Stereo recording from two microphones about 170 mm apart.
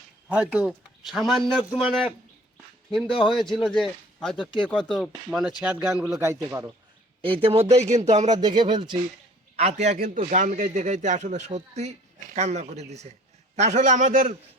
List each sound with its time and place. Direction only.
0.3 s a man's voice: 10° right (ahead or behind)
3.3 s speech: centre (ahead or behind)
6.1 s a man's voice: 15° right (ahead or behind)
7.4 s speech: 35° right (ahead or behind)
8.3 s speech: 25° right (ahead or behind)
9.6 s a man's voice: 40° right (ahead or behind)